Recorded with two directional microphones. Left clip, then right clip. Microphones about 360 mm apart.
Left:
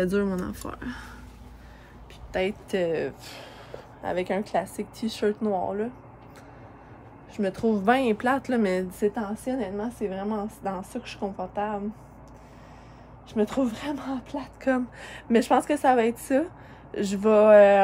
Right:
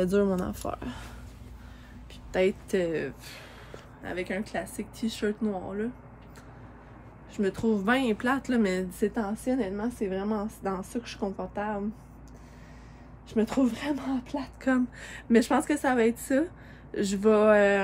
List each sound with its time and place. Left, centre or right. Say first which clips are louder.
0.0 s speech: even; centre
2.3 s speech: right 1 dB; centre
7.3 s speech: left 2 dB; centre
13.3 s speech: left 1 dB; centre